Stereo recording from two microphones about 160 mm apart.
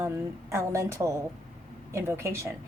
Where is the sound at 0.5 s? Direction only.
20° right (ahead or behind).